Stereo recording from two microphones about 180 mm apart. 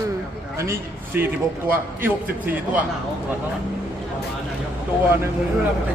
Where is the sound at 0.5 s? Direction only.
15° right (ahead or behind).